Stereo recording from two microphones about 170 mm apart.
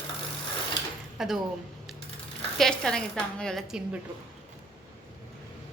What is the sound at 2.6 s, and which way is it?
A woman's voice, 5° left (ahead or behind).